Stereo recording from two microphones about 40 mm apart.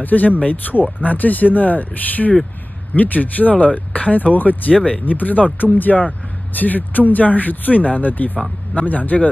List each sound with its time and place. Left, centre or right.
0.0 s speech: left
4.7 s speech: left
5.0 s speech: left